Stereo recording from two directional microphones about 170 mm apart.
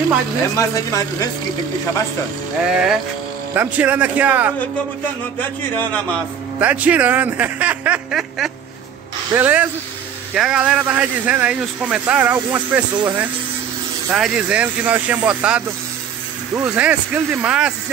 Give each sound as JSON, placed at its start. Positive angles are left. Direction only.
{"t": 0.6, "sound": "speech", "side_deg": 20}
{"t": 2.7, "sound": "speech", "side_deg": -5}
{"t": 5.4, "sound": "a man's voice", "side_deg": 10}
{"t": 6.6, "sound": "speech", "side_deg": -10}